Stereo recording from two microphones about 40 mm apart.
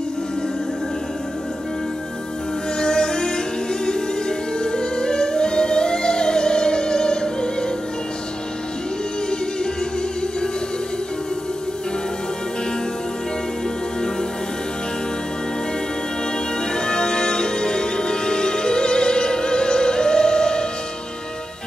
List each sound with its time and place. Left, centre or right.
2.8 s music: centre
16.7 s music: centre